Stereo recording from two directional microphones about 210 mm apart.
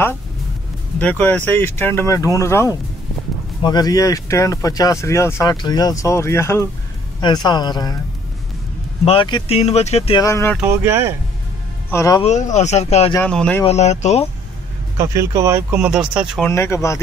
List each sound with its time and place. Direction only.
0.9 s speech: 5° left (ahead or behind)
9.0 s speech: 25° left (ahead or behind)
10.2 s speech: 10° left (ahead or behind)
10.6 s speech: 10° right (ahead or behind)
11.9 s speech: 15° left (ahead or behind)
12.2 s speech: 35° left (ahead or behind)
13.1 s speech: 5° left (ahead or behind)
13.7 s speech: 30° left (ahead or behind)
15.0 s speech: 15° right (ahead or behind)
16.4 s speech: 10° left (ahead or behind)